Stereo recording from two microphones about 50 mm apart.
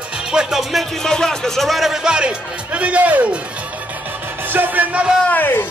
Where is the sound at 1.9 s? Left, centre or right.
Centre.